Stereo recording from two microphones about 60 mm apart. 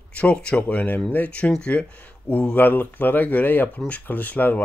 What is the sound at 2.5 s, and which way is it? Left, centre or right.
Speech, left.